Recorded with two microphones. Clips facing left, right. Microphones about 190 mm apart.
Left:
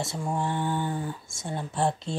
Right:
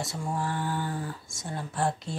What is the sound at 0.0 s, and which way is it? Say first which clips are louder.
Speech: left 2 dB; 25° left (ahead or behind).